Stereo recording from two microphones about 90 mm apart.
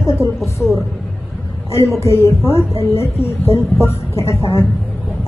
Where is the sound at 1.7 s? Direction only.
30° left (ahead or behind).